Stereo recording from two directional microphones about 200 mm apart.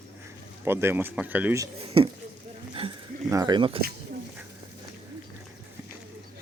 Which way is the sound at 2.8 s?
30° right (ahead or behind).